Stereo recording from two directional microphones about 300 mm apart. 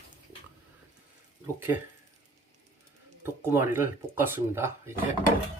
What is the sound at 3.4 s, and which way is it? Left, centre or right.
Speech, centre.